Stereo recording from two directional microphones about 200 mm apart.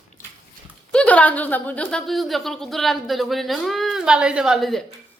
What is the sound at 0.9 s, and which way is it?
A woman's voice, 5° left (ahead or behind).